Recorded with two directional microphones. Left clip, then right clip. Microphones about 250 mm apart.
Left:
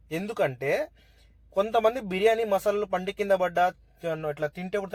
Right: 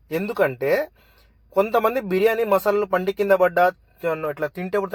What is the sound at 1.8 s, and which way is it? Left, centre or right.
Speech, centre.